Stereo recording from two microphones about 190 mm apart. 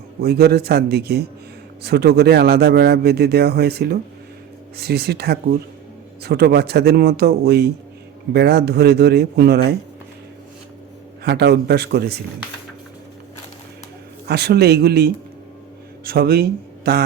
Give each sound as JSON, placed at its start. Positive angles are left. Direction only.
{"t": 0.2, "sound": "a man's voice", "side_deg": -55}
{"t": 11.2, "sound": "a man's voice", "side_deg": -60}
{"t": 14.3, "sound": "a man's voice", "side_deg": -60}